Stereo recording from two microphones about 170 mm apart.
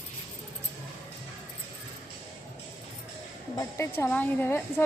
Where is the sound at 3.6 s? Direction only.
15° left (ahead or behind).